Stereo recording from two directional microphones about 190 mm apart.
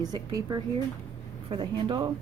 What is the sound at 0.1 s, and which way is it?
Speech, 20° right (ahead or behind).